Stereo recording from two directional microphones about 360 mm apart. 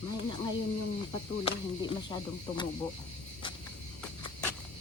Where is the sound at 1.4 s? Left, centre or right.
Centre.